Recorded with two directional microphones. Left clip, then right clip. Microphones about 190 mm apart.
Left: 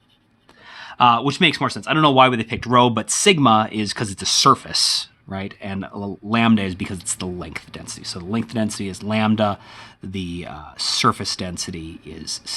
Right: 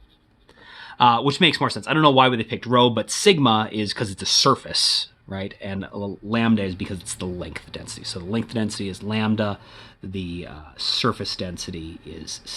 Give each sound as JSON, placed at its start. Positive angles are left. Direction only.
{"t": 0.8, "sound": "speech", "side_deg": 20}